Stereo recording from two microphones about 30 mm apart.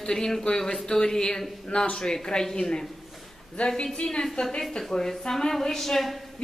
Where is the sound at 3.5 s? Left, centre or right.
Left.